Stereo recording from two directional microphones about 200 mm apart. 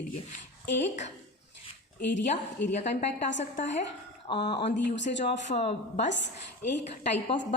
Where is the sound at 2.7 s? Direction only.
35° left (ahead or behind).